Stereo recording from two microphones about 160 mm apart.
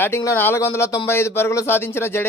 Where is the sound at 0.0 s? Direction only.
15° left (ahead or behind).